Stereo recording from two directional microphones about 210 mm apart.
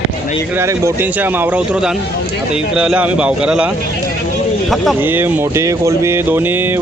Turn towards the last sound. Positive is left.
turn(degrees=-10)  # may be behind; listen again after turning